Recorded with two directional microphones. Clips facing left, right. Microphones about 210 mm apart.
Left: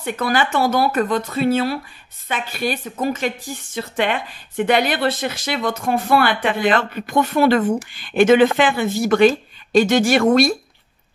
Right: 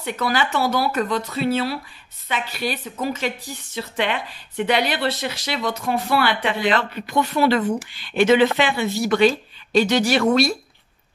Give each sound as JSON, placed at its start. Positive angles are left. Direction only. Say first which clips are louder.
{"t": 0.0, "sound": "speech", "louder": "left 2 dB", "side_deg": 50}